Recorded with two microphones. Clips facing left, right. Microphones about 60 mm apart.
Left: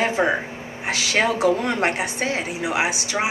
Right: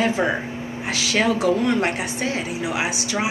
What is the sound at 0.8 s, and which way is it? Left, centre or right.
A woman's voice, left.